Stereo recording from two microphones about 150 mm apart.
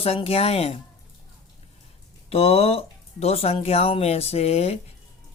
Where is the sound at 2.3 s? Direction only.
40° left (ahead or behind).